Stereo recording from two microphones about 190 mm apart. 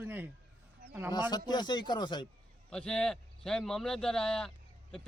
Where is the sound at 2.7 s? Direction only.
5° left (ahead or behind).